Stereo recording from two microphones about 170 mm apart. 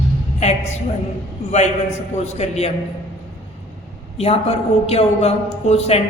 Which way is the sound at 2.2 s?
40° left (ahead or behind).